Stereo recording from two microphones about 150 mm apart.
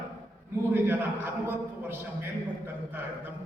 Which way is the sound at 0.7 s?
15° right (ahead or behind).